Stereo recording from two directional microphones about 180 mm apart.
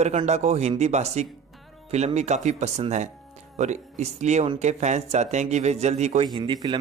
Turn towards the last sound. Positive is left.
turn(degrees=-25)  # may be behind; listen again after turning